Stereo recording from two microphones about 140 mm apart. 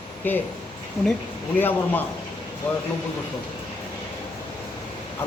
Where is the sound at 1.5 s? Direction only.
15° left (ahead or behind).